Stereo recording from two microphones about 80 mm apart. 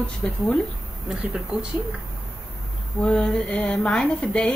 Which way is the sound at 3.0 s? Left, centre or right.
Centre.